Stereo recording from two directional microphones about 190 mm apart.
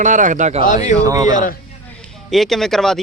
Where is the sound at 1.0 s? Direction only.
15° right (ahead or behind).